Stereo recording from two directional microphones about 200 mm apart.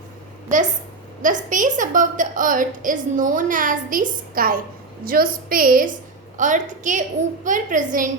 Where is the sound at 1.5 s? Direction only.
40° right (ahead or behind).